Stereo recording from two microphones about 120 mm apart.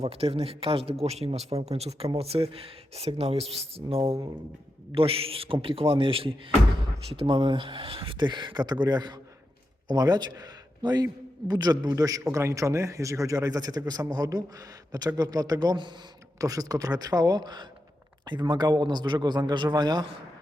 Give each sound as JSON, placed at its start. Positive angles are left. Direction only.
{"t": 0.0, "sound": "a man's voice", "side_deg": -60}